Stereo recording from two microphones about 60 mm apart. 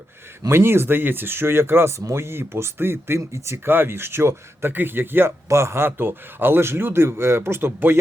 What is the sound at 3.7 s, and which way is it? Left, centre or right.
Speech, right.